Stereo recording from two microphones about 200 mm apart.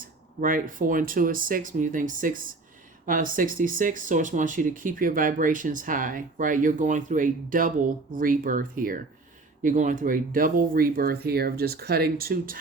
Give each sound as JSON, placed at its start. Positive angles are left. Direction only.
{"t": 0.0, "sound": "speech", "side_deg": -45}